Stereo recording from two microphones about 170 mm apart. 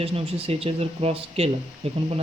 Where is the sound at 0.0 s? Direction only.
35° right (ahead or behind).